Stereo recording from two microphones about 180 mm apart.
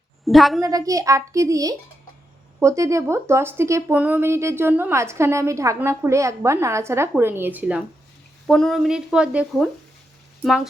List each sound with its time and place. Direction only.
0.3 s speech: centre (ahead or behind)
0.6 s speech: 20° right (ahead or behind); by 10.7 s centre (ahead or behind)